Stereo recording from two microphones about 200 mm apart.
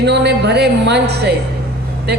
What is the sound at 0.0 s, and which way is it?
Speech, 55° right (ahead or behind).